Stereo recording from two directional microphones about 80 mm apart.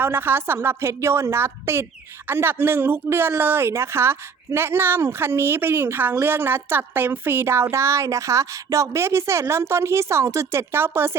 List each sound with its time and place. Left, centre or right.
0.0 s speech: right